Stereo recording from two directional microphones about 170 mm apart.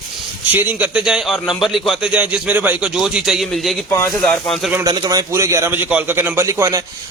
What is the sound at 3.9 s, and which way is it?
Speech, 15° left (ahead or behind).